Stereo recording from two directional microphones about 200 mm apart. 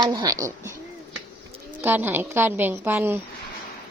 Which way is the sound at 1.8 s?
10° right (ahead or behind).